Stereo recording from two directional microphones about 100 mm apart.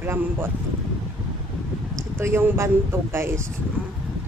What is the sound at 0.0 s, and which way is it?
Speech, 25° right (ahead or behind).